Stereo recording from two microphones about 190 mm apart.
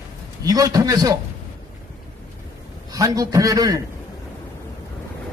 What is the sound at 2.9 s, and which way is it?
Speech, 20° right (ahead or behind).